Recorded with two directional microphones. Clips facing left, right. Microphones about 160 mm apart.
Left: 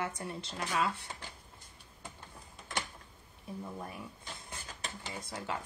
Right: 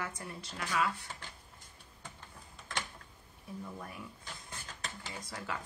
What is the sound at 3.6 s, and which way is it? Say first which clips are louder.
Speech: left 2 dB; 20° left (ahead or behind).